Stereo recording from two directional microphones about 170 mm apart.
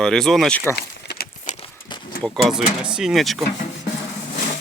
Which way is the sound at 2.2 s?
Centre (ahead or behind).